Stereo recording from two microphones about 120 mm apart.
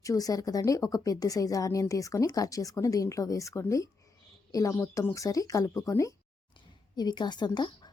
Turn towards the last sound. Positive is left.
turn(degrees=35)  # may be behind; listen again after turning